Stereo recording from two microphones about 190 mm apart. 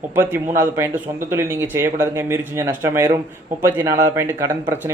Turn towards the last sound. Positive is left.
turn(degrees=-15)  # may be behind; listen again after turning